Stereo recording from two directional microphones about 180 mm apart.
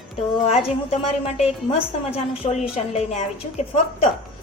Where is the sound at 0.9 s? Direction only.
35° left (ahead or behind).